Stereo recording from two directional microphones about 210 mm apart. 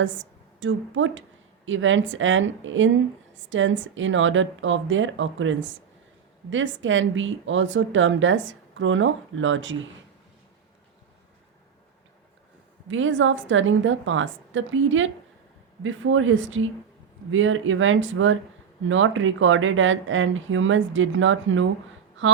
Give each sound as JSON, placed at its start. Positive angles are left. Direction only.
{"t": 0.0, "sound": "a woman's voice", "side_deg": -65}
{"t": 12.9, "sound": "a woman's voice", "side_deg": -65}